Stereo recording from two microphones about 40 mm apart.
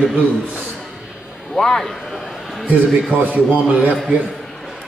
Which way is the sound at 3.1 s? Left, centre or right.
Right.